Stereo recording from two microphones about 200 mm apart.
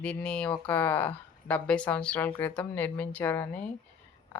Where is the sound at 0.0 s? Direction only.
5° left (ahead or behind).